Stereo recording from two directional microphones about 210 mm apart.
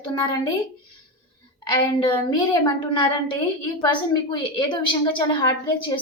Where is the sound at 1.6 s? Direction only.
20° left (ahead or behind).